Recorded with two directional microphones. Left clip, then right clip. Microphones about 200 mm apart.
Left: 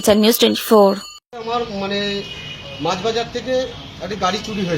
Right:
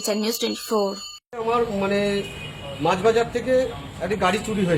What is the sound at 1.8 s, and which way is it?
Speech, centre (ahead or behind).